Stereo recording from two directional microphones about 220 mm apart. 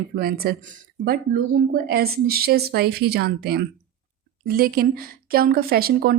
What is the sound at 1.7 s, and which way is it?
Speech, 45° right (ahead or behind).